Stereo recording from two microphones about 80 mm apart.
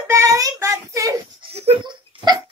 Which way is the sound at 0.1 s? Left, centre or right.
Right.